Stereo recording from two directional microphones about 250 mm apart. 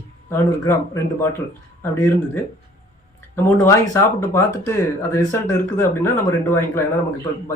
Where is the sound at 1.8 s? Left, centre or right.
Centre.